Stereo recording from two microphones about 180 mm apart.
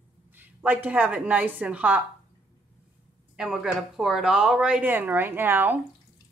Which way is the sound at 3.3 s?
5° right (ahead or behind).